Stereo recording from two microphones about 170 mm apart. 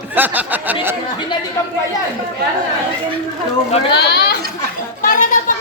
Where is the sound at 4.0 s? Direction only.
75° left (ahead or behind).